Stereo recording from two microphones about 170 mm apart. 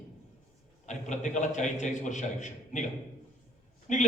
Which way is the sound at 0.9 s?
45° left (ahead or behind).